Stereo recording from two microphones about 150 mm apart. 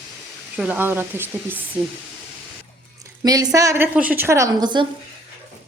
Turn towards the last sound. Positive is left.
turn(degrees=-30)  # may be behind; listen again after turning